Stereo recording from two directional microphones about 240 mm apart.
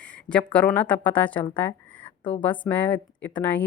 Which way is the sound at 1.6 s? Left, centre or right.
Centre.